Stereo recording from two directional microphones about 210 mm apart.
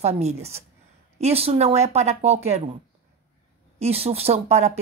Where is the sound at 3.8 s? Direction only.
30° right (ahead or behind).